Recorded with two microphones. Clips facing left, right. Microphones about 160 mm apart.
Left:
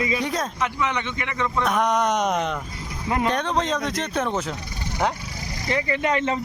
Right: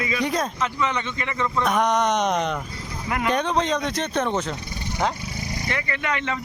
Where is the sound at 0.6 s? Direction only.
15° left (ahead or behind).